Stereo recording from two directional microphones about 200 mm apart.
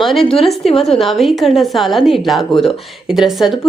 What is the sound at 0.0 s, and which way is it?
A woman's voice, centre (ahead or behind).